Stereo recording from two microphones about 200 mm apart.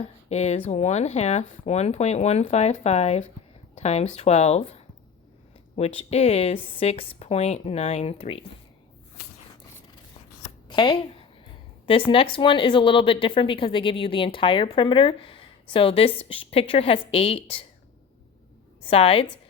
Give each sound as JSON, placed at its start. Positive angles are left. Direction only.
{"t": 0.0, "sound": "speech", "side_deg": 35}
{"t": 10.7, "sound": "speech", "side_deg": 25}
{"t": 18.8, "sound": "a woman's voice", "side_deg": 30}